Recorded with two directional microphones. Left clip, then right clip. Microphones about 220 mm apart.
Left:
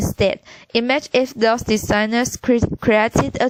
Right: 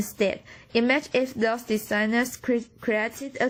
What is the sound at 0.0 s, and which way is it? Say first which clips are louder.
A woman's voice: left 7 dB; 40° left (ahead or behind).